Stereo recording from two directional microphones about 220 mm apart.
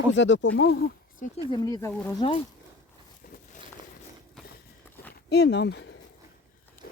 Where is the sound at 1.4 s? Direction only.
15° left (ahead or behind).